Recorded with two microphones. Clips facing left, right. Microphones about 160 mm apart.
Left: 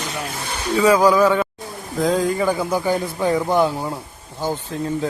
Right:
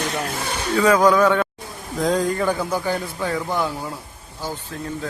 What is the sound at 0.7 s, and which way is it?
A man's voice, 10° left (ahead or behind).